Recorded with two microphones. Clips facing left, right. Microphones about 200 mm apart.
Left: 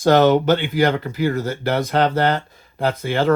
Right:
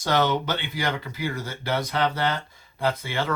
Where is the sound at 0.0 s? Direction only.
50° left (ahead or behind).